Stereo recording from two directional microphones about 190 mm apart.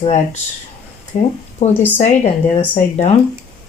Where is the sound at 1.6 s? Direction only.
35° left (ahead or behind).